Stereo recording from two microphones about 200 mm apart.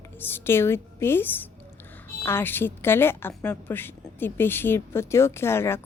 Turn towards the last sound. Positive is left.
turn(degrees=10)  # may be behind; listen again after turning